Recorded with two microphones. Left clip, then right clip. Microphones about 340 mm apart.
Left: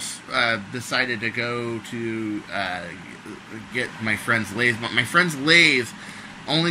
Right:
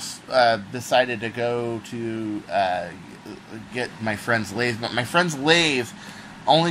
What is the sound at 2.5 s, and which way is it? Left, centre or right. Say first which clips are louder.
Speech: right 8 dB; centre.